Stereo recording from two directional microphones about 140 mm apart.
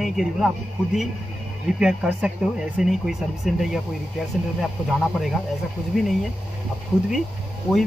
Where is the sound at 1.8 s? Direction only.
5° right (ahead or behind).